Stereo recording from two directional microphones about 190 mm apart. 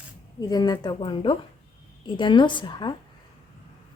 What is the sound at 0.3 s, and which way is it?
Speech, 20° left (ahead or behind).